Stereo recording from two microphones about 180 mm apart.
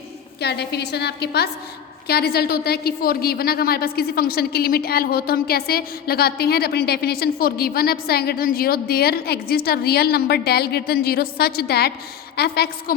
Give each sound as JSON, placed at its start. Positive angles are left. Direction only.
{"t": 0.3, "sound": "a woman's voice", "side_deg": 65}